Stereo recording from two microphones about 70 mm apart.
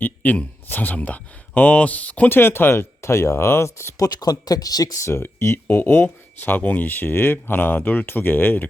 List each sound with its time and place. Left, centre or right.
0.0 s speech: left
4.0 s speech: left
5.1 s speech: left